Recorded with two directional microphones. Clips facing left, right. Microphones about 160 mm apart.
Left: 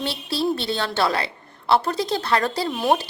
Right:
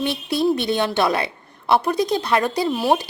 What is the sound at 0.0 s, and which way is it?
A woman's voice, 20° right (ahead or behind).